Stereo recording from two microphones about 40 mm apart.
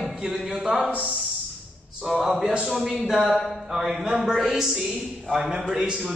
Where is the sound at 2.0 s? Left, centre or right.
Centre.